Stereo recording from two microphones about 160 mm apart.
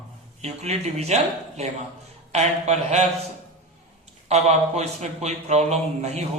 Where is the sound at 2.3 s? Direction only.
45° right (ahead or behind).